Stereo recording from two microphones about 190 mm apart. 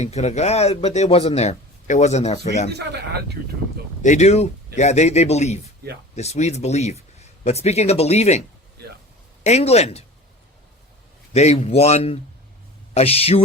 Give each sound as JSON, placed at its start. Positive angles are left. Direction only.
{"t": 0.0, "sound": "speech", "side_deg": 35}
{"t": 2.7, "sound": "speech", "side_deg": -60}
{"t": 4.0, "sound": "speech", "side_deg": 40}
{"t": 11.3, "sound": "speech", "side_deg": 35}